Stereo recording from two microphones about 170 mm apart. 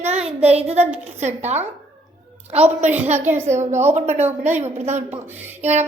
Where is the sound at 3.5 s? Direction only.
40° right (ahead or behind).